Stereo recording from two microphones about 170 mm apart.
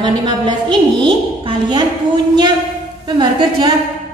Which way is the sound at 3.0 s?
25° right (ahead or behind).